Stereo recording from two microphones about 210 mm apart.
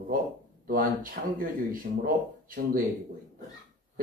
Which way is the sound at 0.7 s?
40° right (ahead or behind).